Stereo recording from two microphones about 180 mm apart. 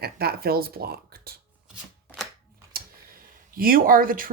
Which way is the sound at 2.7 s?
55° right (ahead or behind).